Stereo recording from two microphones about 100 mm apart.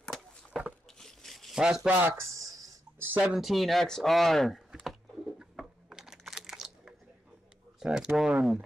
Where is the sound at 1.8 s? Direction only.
30° right (ahead or behind).